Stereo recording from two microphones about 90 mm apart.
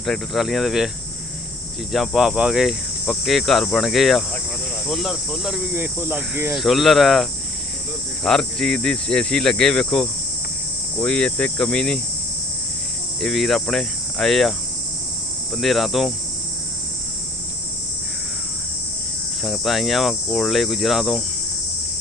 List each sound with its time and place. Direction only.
0.0 s cricket: centre (ahead or behind)
1.9 s cricket: centre (ahead or behind)
5.7 s cricket: 20° right (ahead or behind)
6.5 s cricket: centre (ahead or behind)
13.2 s cricket: 5° left (ahead or behind)
15.5 s cricket: centre (ahead or behind)
19.4 s cricket: centre (ahead or behind)